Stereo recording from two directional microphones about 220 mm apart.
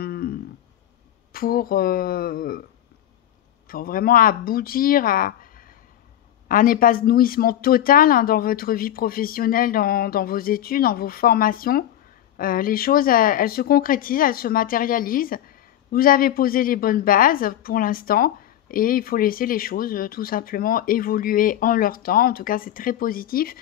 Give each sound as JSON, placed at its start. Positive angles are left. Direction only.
{"t": 0.0, "sound": "a sound", "side_deg": 45}
{"t": 1.3, "sound": "speech", "side_deg": 40}
{"t": 3.6, "sound": "speech", "side_deg": 40}